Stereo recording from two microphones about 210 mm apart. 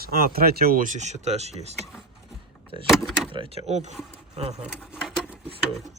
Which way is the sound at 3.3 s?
25° right (ahead or behind).